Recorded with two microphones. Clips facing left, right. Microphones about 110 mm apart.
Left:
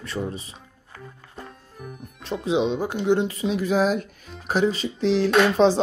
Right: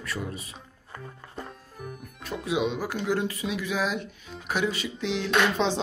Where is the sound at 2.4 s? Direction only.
25° left (ahead or behind).